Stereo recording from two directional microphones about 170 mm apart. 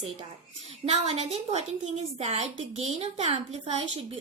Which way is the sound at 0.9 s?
40° right (ahead or behind).